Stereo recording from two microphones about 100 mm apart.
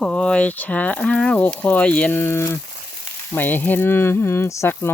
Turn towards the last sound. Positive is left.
turn(degrees=25)  # may be behind; listen again after turning